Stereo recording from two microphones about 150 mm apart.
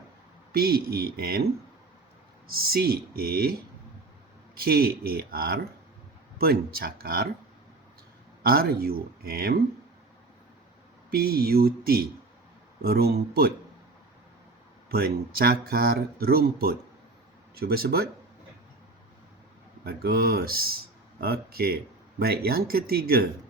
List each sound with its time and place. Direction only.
0.5 s speech: 90° right
2.5 s speech: 90° right
4.6 s speech: 90° right
8.4 s speech: 90° right
11.1 s speech: 90° right
14.8 s speech: 90° right
19.8 s speech: 90° right